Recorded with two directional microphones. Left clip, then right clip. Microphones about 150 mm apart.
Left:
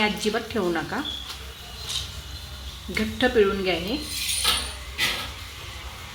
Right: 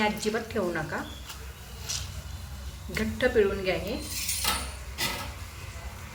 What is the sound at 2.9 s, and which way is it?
Speech, 70° left (ahead or behind).